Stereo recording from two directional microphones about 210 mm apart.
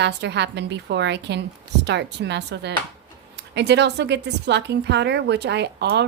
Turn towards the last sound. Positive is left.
turn(degrees=-55)  # may be behind; listen again after turning